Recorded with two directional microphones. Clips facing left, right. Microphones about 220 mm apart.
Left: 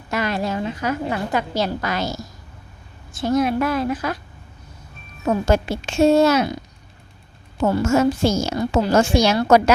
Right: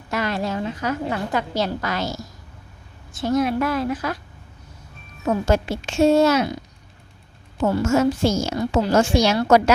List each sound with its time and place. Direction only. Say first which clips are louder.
0.1 s a woman's voice: left 1 dB; 15° left (ahead or behind)
5.2 s speech: left 1 dB; 35° left (ahead or behind)
7.6 s a woman's voice: left 1 dB; 45° left (ahead or behind)